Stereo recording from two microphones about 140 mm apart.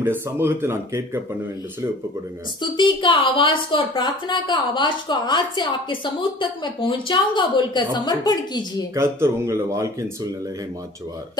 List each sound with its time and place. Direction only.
0.0 s speech: 15° right (ahead or behind)
2.6 s a woman's voice: 35° left (ahead or behind)
8.9 s speech: 20° right (ahead or behind)